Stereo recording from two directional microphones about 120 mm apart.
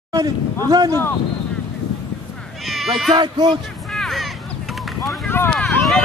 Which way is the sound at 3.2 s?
40° right (ahead or behind).